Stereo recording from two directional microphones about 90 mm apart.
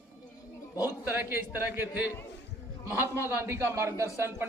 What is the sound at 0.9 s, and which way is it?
A man's voice, 20° right (ahead or behind).